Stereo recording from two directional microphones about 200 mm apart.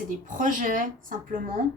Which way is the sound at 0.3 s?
40° right (ahead or behind).